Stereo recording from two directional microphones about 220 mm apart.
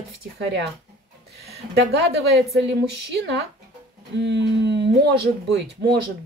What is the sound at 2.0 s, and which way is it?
Speech, 50° right (ahead or behind).